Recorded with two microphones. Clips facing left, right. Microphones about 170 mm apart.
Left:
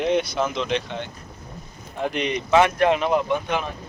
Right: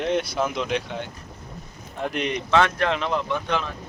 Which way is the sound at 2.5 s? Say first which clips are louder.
Left 4 dB; 15° left (ahead or behind).